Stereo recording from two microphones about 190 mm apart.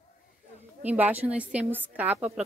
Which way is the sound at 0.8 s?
10° right (ahead or behind).